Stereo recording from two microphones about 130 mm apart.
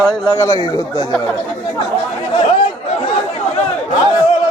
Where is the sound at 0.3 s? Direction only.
25° left (ahead or behind).